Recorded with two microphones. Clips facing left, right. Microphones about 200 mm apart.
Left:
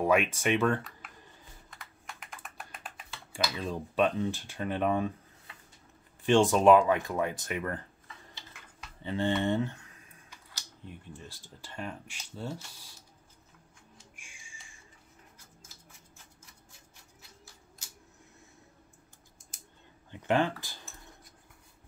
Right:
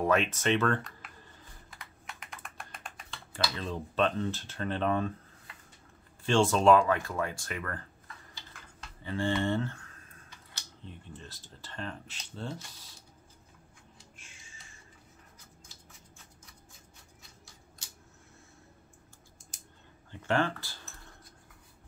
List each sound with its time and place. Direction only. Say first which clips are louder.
0.0 s speech: left 1 dB; 10° left (ahead or behind)
1.7 s typing: even; centre (ahead or behind)
3.3 s speech: left 1 dB; 15° left (ahead or behind)
6.2 s speech: left 2 dB; 15° left (ahead or behind)
8.8 s a sound: left 2 dB; 20° left (ahead or behind)
9.4 s speech: left 1 dB; 15° left (ahead or behind)
14.1 s music: even; 10° left (ahead or behind)
20.1 s speech: left 2 dB; 15° left (ahead or behind)